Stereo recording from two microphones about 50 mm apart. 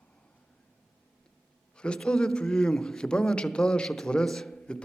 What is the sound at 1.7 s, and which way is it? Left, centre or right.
A man's voice, centre.